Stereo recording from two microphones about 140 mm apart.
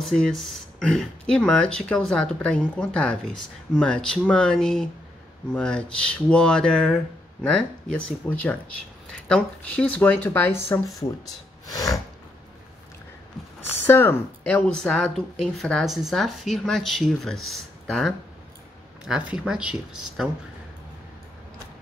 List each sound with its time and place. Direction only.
0.0 s speech: 5° left (ahead or behind)
11.6 s snort: 25° left (ahead or behind)
13.7 s speech: 15° left (ahead or behind); by 20.2 s 5° right (ahead or behind)